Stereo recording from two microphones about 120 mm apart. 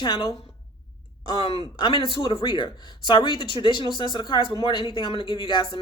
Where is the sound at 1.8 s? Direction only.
40° left (ahead or behind).